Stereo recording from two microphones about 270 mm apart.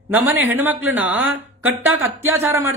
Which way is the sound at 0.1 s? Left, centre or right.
Centre.